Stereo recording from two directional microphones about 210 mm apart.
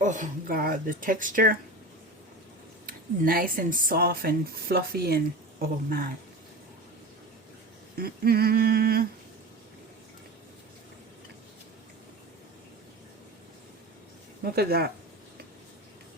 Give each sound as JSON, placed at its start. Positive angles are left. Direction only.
{"t": 0.0, "sound": "speech", "side_deg": -35}
{"t": 2.8, "sound": "speech", "side_deg": -45}
{"t": 7.9, "sound": "speech", "side_deg": -45}
{"t": 14.4, "sound": "speech", "side_deg": -50}